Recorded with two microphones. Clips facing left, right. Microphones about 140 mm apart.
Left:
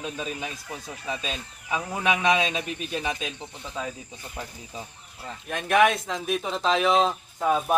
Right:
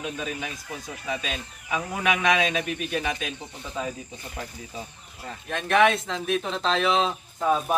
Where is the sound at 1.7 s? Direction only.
30° left (ahead or behind).